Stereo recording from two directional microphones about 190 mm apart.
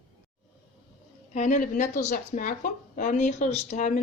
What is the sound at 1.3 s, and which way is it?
Speech, 40° left (ahead or behind).